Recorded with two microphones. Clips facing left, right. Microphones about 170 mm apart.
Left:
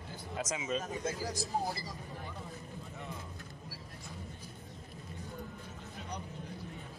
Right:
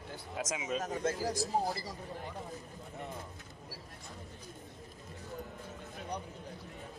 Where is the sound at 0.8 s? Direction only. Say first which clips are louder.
Right 3 dB; 70° right (ahead or behind).